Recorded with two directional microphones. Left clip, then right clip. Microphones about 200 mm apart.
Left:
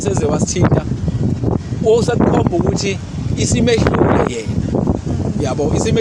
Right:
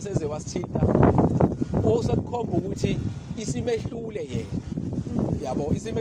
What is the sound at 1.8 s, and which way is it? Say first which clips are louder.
Speech: left 11 dB; 20° left (ahead or behind).